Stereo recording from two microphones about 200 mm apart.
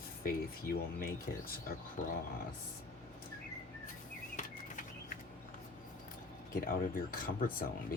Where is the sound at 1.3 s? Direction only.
50° left (ahead or behind).